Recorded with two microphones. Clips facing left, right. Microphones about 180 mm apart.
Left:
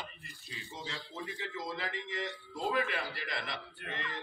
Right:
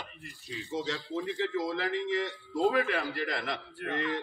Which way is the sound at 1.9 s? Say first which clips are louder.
Right 8 dB; centre (ahead or behind).